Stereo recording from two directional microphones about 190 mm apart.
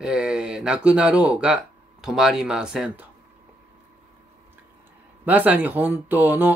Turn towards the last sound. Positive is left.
turn(degrees=-10)  # may be behind; listen again after turning